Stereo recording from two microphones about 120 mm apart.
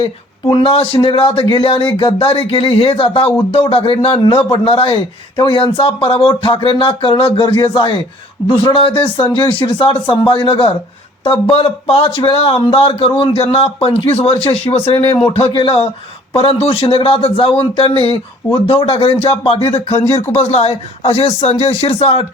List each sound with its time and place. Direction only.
0.0 s speech: 45° left (ahead or behind)